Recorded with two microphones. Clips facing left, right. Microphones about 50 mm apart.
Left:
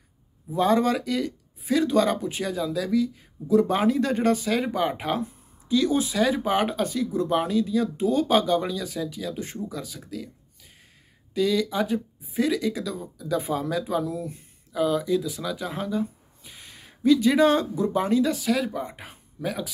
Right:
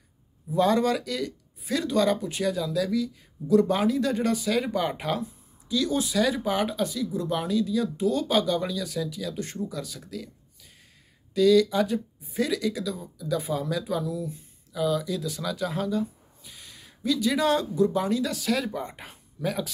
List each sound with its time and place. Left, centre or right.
0.5 s speech: left
4.6 s speech: centre
5.2 s speech: left; by 10.3 s centre
11.3 s speech: left
14.0 s speech: left
15.2 s speech: centre
18.4 s speech: centre